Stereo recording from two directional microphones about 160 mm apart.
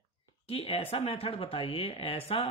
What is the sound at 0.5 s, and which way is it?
Speech, 35° left (ahead or behind).